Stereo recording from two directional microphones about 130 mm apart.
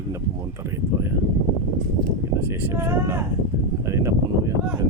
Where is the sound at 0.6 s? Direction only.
20° right (ahead or behind).